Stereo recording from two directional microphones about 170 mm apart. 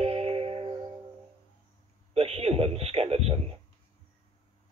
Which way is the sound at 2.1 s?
35° right (ahead or behind).